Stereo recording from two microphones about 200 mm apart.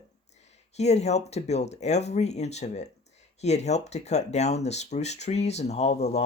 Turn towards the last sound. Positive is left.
turn(degrees=35)  # may be behind; listen again after turning